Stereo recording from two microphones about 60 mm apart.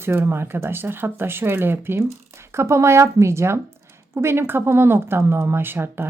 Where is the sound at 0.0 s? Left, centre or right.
Right.